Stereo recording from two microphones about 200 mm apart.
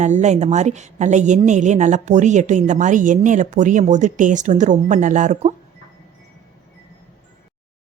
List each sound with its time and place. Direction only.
0.0 s a woman's voice: 35° right (ahead or behind)